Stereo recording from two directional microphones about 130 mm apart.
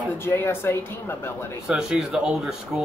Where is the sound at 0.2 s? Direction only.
20° left (ahead or behind).